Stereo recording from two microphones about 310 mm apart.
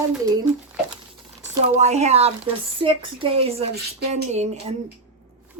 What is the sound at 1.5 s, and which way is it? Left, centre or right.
Speech, right.